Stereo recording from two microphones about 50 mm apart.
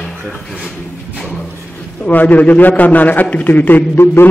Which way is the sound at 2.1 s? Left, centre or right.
Left.